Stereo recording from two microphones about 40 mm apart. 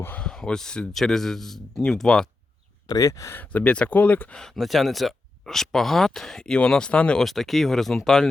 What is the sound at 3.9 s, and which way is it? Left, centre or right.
Speech, left.